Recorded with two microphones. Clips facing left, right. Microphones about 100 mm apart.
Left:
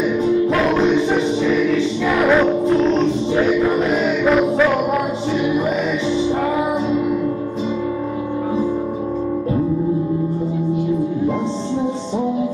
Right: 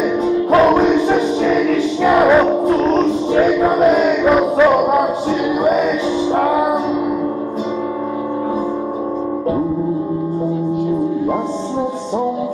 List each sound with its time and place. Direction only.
2.2 s music: 15° right (ahead or behind)
2.6 s music: 45° right (ahead or behind)
4.4 s music: 20° right (ahead or behind)